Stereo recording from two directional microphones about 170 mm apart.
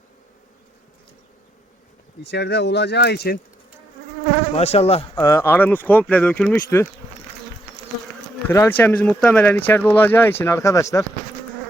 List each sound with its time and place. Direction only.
2.2 s speech: 80° left
4.5 s insect: 40° left (ahead or behind)
5.1 s speech: 15° left (ahead or behind)
8.5 s speech: 10° left (ahead or behind)